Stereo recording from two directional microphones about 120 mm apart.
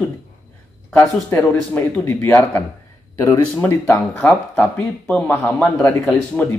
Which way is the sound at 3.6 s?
15° left (ahead or behind).